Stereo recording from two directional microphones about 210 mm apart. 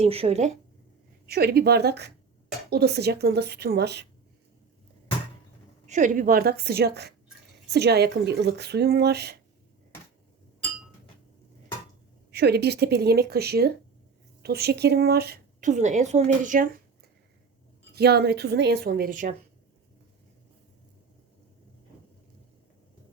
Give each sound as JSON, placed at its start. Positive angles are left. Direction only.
{"t": 0.0, "sound": "speech", "side_deg": -30}
{"t": 1.3, "sound": "speech", "side_deg": -50}
{"t": 5.9, "sound": "speech", "side_deg": -40}
{"t": 12.3, "sound": "a woman's voice", "side_deg": -50}
{"t": 15.7, "sound": "speech", "side_deg": -35}
{"t": 17.9, "sound": "speech", "side_deg": -50}